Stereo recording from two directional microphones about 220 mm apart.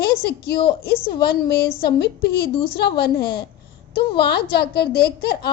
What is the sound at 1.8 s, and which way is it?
A child's voice, 45° left (ahead or behind).